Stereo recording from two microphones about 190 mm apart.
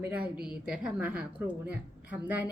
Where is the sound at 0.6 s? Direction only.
5° right (ahead or behind).